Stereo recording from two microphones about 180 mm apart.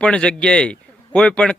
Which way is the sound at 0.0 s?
5° left (ahead or behind).